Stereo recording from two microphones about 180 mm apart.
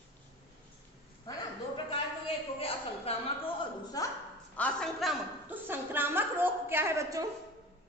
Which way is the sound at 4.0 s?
20° left (ahead or behind).